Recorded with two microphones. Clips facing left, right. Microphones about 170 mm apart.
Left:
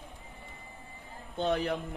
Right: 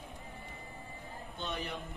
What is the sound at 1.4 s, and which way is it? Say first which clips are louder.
Speech: left 11 dB; 75° left (ahead or behind).